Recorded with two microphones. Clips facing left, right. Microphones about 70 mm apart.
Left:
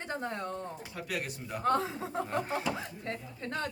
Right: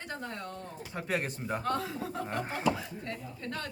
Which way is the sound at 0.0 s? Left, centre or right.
Left.